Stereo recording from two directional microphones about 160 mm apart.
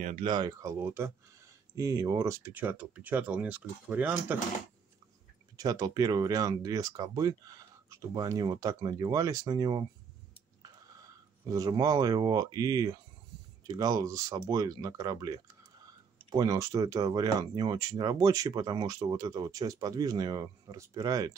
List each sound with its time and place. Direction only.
0.0 s speech: 40° right (ahead or behind)
0.3 s speech: 25° right (ahead or behind); by 4.4 s 10° right (ahead or behind)
5.6 s speech: 25° right (ahead or behind)
11.4 s speech: 20° right (ahead or behind)